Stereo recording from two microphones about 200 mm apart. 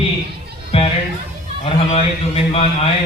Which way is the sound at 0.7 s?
30° left (ahead or behind).